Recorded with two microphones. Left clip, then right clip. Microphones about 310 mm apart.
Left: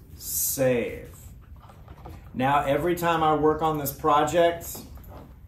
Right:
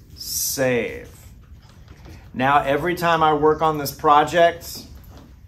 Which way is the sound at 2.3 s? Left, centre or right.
Right.